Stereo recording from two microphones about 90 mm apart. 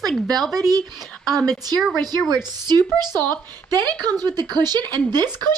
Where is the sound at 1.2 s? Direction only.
Centre (ahead or behind).